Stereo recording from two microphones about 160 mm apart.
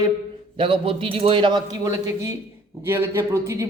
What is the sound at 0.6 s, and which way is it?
A man's voice, 35° right (ahead or behind).